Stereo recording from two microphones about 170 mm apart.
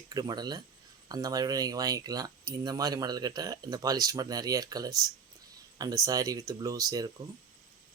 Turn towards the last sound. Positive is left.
turn(degrees=-20)  # may be behind; listen again after turning